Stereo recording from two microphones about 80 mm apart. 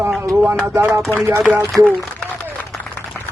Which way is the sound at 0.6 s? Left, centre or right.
Right.